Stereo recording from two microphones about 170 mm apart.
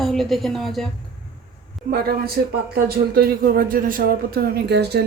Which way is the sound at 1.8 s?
60° right (ahead or behind).